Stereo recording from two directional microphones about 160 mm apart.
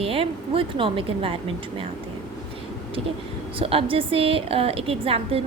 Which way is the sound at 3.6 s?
35° right (ahead or behind).